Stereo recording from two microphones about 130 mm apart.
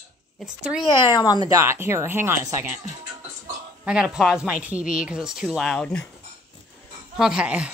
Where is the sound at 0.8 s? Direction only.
35° left (ahead or behind).